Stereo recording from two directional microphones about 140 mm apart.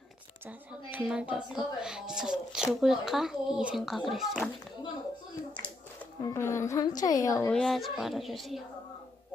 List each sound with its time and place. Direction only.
0.4 s a woman's voice: 15° right (ahead or behind)
5.5 s a woman's voice: 15° left (ahead or behind)
7.5 s a child's voice: centre (ahead or behind)